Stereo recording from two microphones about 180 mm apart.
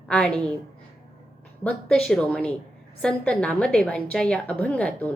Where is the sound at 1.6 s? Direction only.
5° left (ahead or behind).